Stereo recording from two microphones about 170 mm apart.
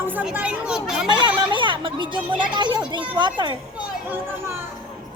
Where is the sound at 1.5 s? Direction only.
30° right (ahead or behind).